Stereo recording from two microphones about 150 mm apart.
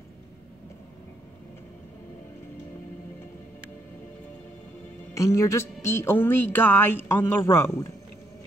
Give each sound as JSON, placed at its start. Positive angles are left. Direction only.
{"t": 5.1, "sound": "a woman's voice", "side_deg": 20}